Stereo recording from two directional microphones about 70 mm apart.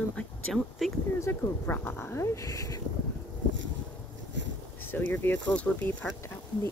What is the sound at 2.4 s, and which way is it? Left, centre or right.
Speech, left.